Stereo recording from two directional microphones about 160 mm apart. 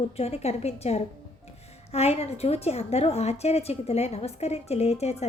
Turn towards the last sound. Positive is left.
turn(degrees=40)  # may be behind; listen again after turning